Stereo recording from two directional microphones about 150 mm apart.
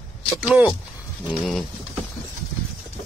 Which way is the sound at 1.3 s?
Centre (ahead or behind).